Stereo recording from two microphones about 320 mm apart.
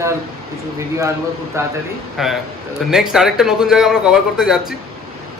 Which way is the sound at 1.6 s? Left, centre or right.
Centre.